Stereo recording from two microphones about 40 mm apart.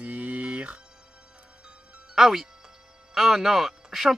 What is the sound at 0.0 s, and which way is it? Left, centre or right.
Music, right.